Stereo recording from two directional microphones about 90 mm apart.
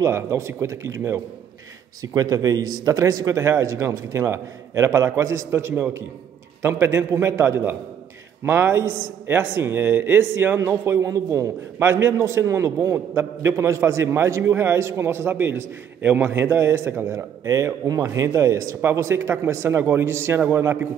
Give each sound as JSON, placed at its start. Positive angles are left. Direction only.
{"t": 0.0, "sound": "speech", "side_deg": -30}
{"t": 2.0, "sound": "a man's voice", "side_deg": -40}